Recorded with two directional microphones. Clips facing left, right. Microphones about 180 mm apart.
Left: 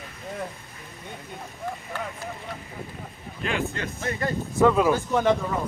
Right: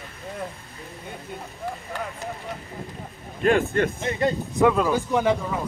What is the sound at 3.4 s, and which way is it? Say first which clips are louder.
Speech: right 9 dB; 55° right (ahead or behind).